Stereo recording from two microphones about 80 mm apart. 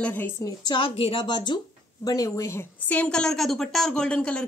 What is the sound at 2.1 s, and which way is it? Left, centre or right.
Speech, left.